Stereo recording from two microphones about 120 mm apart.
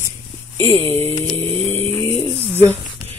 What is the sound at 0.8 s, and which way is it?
Speech, 55° right (ahead or behind).